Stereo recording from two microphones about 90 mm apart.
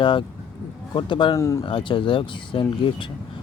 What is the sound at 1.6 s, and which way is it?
Speech, 65° left (ahead or behind).